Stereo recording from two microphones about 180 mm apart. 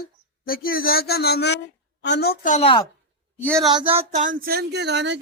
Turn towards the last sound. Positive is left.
turn(degrees=-75)  # may be behind; listen again after turning